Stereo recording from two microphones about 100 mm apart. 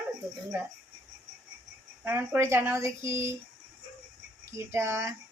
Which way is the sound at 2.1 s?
20° right (ahead or behind).